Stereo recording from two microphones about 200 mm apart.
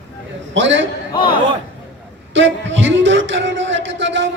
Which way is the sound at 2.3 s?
70° right (ahead or behind).